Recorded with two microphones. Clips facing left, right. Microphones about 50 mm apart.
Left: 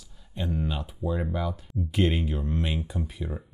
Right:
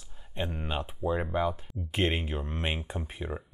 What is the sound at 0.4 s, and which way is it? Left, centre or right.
Speech, right.